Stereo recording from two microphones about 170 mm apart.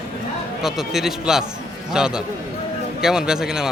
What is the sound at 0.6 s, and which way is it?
A man's voice, centre (ahead or behind).